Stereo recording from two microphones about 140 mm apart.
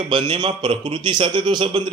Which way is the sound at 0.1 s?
35° right (ahead or behind).